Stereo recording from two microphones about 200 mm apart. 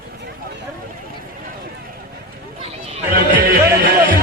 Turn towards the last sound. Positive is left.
turn(degrees=-50)  # may be behind; listen again after turning